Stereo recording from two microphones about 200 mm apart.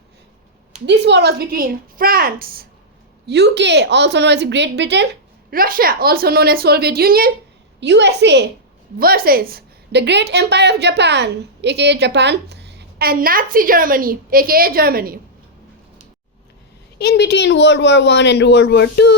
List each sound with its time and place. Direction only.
0.9 s a woman's voice: 60° right (ahead or behind)
3.2 s a woman's voice: 60° right (ahead or behind)
5.5 s a woman's voice: 45° right (ahead or behind)
7.8 s a woman's voice: 60° right (ahead or behind)
9.0 s a woman's voice: 50° right (ahead or behind)
17.0 s speech: 55° left (ahead or behind)